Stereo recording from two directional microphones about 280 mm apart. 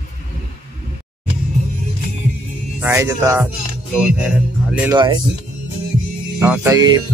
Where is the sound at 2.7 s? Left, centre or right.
Centre.